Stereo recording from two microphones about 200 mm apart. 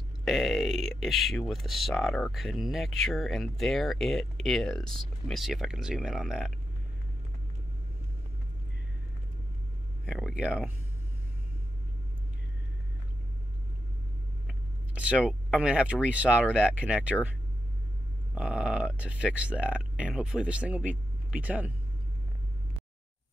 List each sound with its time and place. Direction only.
0.2 s speech: centre (ahead or behind)
10.0 s speech: 5° right (ahead or behind)
14.5 s speech: 5° right (ahead or behind)
18.3 s speech: 5° right (ahead or behind)